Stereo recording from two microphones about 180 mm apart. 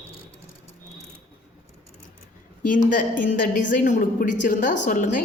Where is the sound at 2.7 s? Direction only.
45° left (ahead or behind).